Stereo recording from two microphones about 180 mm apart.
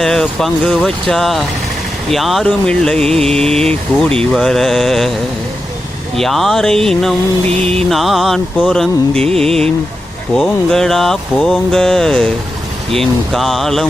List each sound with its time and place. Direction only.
0.0 s speech: 5° left (ahead or behind)
6.1 s speech: centre (ahead or behind)